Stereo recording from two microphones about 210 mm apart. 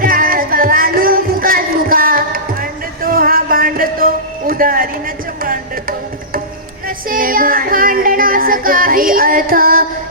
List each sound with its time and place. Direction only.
0.0 s music: 45° right (ahead or behind)
6.8 s music: 40° right (ahead or behind)